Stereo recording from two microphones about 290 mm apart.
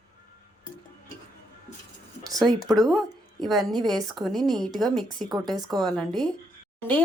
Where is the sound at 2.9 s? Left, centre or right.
Centre.